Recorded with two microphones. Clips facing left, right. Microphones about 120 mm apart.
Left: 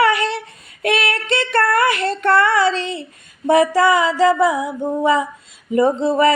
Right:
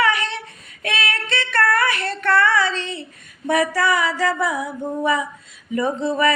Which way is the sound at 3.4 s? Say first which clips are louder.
Left 6 dB; 25° left (ahead or behind).